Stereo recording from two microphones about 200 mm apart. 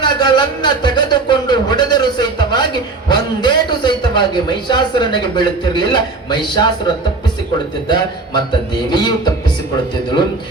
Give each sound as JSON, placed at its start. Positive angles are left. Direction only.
{"t": 0.0, "sound": "a man's voice", "side_deg": 20}
{"t": 7.9, "sound": "a man's voice", "side_deg": 20}